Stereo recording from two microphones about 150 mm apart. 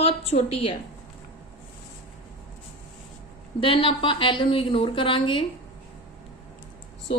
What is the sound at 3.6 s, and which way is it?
A woman's voice, 35° left (ahead or behind).